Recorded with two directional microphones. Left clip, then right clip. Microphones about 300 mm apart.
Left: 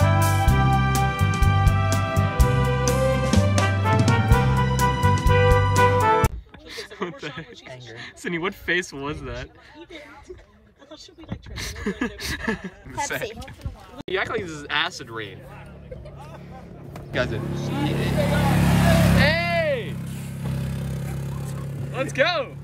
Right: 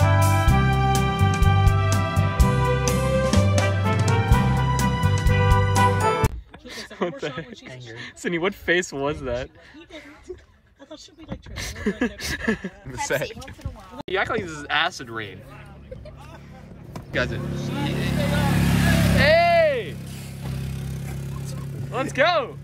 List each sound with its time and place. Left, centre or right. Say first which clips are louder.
0.0 s music: even; centre
8.0 s speech: right 3 dB; centre
12.2 s speech: right 2 dB; centre
17.1 s speech: even; centre
17.6 s speech: left 2 dB; left
18.1 s vehicle: left 2 dB; left
19.1 s vehicle: right 5 dB; centre
21.9 s speech: right 2 dB; centre